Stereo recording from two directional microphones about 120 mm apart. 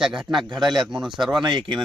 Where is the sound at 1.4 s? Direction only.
40° right (ahead or behind).